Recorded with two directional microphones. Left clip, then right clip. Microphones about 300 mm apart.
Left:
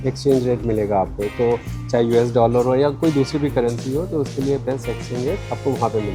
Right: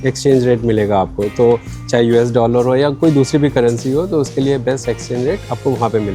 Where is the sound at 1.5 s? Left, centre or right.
Right.